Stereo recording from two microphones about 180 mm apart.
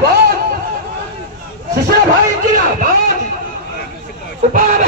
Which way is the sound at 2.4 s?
50° right (ahead or behind).